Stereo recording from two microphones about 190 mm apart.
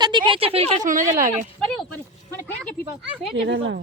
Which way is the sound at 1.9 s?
10° left (ahead or behind).